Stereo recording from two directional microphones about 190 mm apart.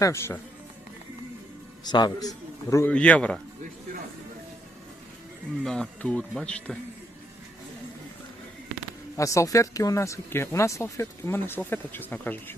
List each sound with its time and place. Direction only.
0.0 s speech: 15° left (ahead or behind)
1.8 s speech: 25° left (ahead or behind); by 3.4 s 5° left (ahead or behind)
5.6 s speech: 5° left (ahead or behind)
9.1 s speech: 15° left (ahead or behind)